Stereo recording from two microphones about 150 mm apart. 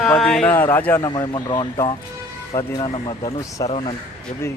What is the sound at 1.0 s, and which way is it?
Speech, 30° left (ahead or behind).